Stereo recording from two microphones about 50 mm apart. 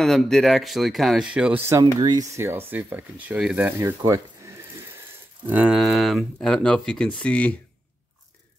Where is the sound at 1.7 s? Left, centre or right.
Right.